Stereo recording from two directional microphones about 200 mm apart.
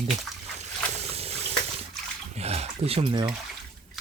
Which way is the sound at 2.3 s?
30° right (ahead or behind).